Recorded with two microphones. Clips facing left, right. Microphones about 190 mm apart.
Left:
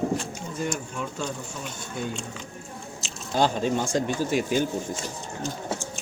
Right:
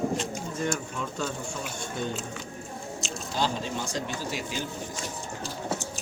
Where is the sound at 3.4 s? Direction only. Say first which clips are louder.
Left 7 dB; 50° left (ahead or behind).